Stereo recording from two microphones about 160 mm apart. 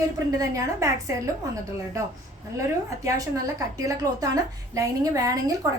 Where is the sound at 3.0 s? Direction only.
20° right (ahead or behind).